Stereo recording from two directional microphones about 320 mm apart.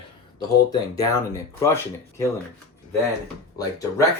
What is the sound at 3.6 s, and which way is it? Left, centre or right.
Speech, centre.